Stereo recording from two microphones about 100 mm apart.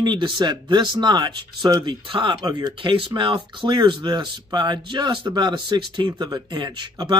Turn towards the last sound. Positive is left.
turn(degrees=-50)  # may be behind; listen again after turning